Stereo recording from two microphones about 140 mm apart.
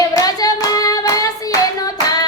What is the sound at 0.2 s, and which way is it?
Hands, 25° left (ahead or behind).